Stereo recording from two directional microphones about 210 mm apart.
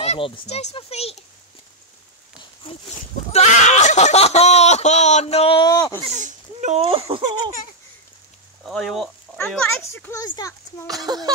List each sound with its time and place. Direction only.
0.0 s a child's voice: 30° left (ahead or behind)
2.3 s a sound: 25° left (ahead or behind)
6.0 s speech: 35° right (ahead or behind)
8.6 s speech: centre (ahead or behind); by 10.9 s 15° left (ahead or behind)
11.1 s music: 20° right (ahead or behind)